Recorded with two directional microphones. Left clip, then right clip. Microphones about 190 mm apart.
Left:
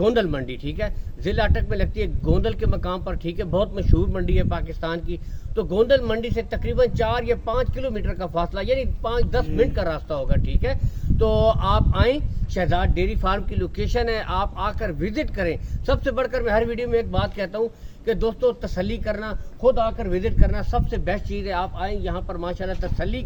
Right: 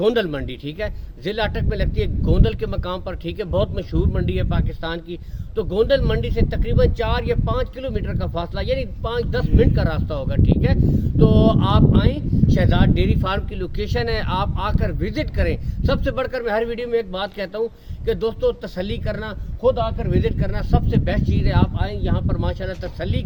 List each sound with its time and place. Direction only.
0.0 s speech: 15° right (ahead or behind)